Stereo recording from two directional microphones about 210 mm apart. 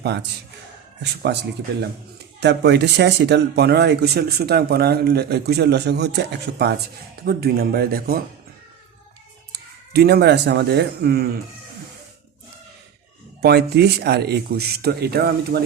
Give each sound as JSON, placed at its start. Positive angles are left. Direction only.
{"t": 0.0, "sound": "speech", "side_deg": -55}
{"t": 1.3, "sound": "speech", "side_deg": -50}
{"t": 9.5, "sound": "speech", "side_deg": -50}
{"t": 13.4, "sound": "speech", "side_deg": -50}